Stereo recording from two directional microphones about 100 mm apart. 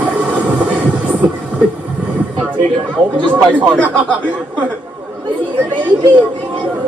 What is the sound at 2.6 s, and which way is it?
Chatter, 15° left (ahead or behind).